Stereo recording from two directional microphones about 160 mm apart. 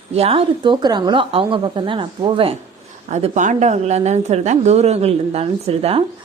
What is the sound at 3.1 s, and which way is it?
A woman's voice, 50° right (ahead or behind).